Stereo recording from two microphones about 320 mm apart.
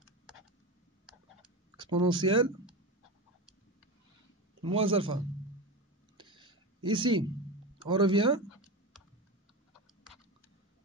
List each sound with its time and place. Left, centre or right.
1.8 s speech: centre
4.6 s speech: centre
6.1 s a sound: centre
7.8 s speech: centre